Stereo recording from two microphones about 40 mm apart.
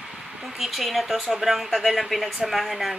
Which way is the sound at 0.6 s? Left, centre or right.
Centre.